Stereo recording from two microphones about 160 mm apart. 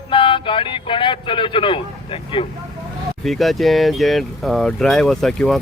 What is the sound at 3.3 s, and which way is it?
Speech, centre (ahead or behind).